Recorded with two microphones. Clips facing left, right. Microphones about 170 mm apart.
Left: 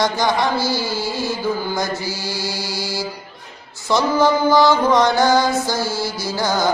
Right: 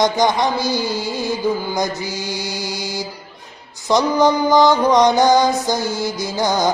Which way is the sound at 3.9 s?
20° right (ahead or behind).